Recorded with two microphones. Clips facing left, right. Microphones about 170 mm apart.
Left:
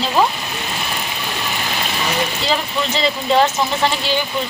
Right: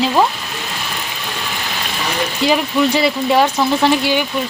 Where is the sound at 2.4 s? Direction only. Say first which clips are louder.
Right 6 dB; 10° right (ahead or behind).